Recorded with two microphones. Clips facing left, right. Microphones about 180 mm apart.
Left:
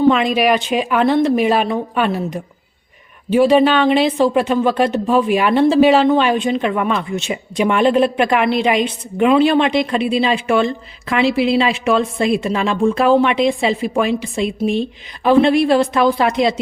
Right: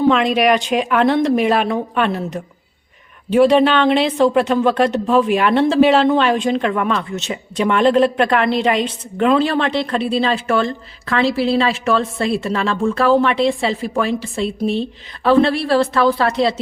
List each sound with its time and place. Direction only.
0.1 s a woman's voice: 5° left (ahead or behind)